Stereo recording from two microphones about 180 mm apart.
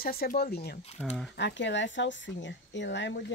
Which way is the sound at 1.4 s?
80° left.